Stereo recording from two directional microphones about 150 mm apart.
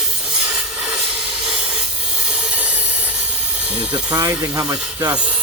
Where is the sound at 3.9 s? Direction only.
25° right (ahead or behind).